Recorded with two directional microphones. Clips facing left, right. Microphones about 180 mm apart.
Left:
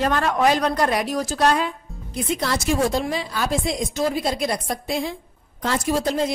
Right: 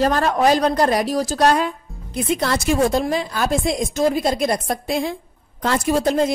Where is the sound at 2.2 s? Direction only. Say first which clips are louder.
Right 3 dB; 60° right (ahead or behind).